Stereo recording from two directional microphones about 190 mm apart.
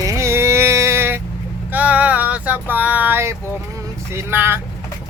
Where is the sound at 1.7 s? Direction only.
10° right (ahead or behind).